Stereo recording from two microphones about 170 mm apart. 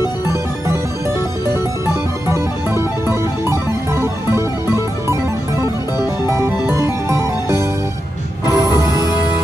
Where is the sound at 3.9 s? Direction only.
15° right (ahead or behind).